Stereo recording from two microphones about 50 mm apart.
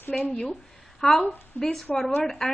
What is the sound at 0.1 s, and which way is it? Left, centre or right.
A woman's voice, centre.